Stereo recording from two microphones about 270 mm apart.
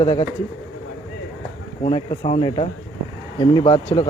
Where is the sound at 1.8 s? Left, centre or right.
Centre.